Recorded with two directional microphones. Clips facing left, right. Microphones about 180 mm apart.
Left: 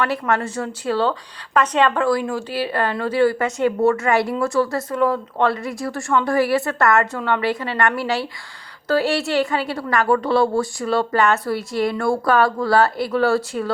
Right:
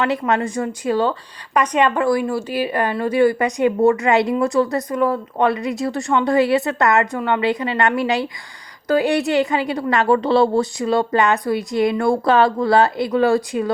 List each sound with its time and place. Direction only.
0.0 s a woman's voice: 20° right (ahead or behind)